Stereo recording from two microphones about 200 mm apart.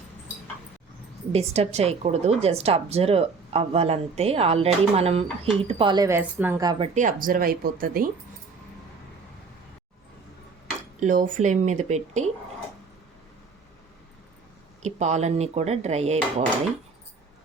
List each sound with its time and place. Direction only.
1.3 s a woman's voice: 30° right (ahead or behind); by 6.7 s 10° right (ahead or behind)
6.7 s speech: 30° right (ahead or behind); by 8.1 s 45° right (ahead or behind)
11.0 s a woman's voice: 40° right (ahead or behind)
14.8 s a woman's voice: 35° right (ahead or behind)